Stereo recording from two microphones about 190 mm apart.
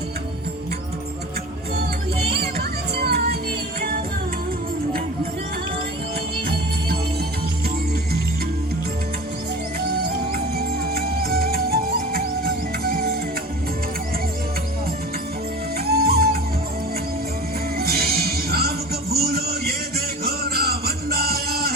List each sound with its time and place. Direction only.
2.3 s music: 55° right (ahead or behind)
6.5 s music: 55° right (ahead or behind)
9.9 s music: 55° right (ahead or behind)
15.9 s music: 55° right (ahead or behind)
17.7 s music: 55° right (ahead or behind)